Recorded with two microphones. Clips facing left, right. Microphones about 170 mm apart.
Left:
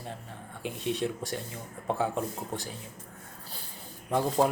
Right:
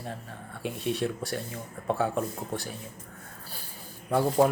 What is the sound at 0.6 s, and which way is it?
Speech, 20° left (ahead or behind).